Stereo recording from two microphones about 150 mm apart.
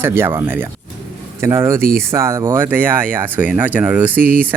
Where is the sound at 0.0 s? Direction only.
15° right (ahead or behind).